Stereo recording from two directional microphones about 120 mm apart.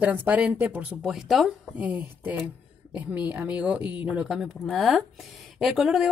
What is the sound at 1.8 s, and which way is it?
Speech, 15° right (ahead or behind).